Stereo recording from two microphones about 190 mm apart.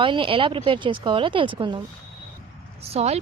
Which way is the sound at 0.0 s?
25° right (ahead or behind).